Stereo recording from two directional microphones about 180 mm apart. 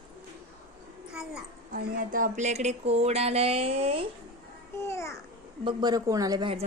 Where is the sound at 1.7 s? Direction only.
50° right (ahead or behind).